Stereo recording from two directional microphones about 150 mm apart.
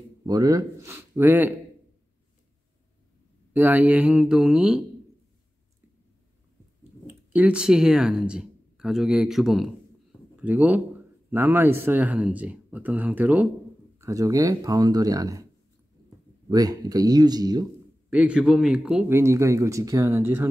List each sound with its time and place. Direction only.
0.2 s speech: 25° right (ahead or behind)
3.5 s speech: 10° right (ahead or behind)
7.1 s speech: 10° right (ahead or behind)
16.4 s speech: 25° right (ahead or behind)
18.1 s speech: 5° right (ahead or behind)
19.1 s speech: 20° right (ahead or behind)